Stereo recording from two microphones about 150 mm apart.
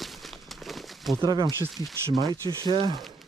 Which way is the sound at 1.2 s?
25° right (ahead or behind).